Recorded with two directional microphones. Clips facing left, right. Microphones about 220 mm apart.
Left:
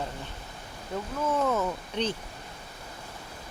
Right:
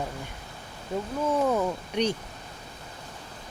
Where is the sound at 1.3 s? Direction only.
15° right (ahead or behind).